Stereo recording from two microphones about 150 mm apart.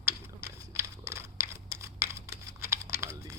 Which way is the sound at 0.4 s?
15° right (ahead or behind).